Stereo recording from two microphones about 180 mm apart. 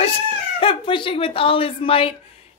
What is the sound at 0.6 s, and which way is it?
Speech, 30° left (ahead or behind).